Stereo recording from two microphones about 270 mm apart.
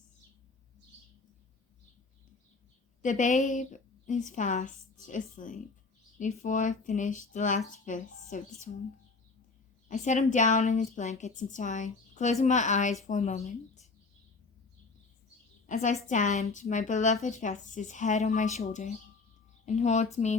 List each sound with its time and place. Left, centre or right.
3.0 s a woman's voice: left
9.9 s a woman's voice: left
15.7 s a woman's voice: left